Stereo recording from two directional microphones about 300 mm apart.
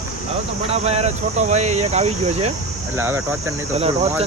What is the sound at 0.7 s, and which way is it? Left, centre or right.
Speech, right.